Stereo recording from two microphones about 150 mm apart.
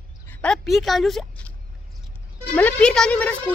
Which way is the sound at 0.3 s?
5° left (ahead or behind).